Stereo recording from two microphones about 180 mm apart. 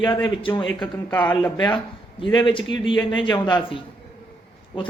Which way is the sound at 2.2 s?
25° left (ahead or behind).